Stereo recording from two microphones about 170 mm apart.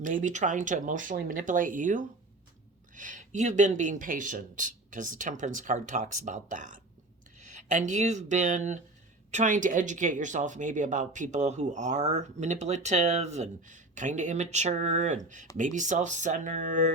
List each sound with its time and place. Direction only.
0.0 s speech: 50° right (ahead or behind)